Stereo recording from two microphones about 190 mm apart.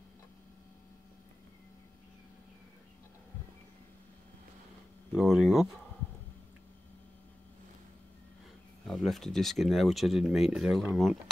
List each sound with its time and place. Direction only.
5.1 s speech: centre (ahead or behind)
8.8 s speech: centre (ahead or behind)